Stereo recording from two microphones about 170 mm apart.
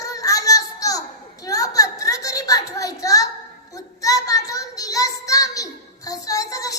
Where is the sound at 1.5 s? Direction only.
20° left (ahead or behind).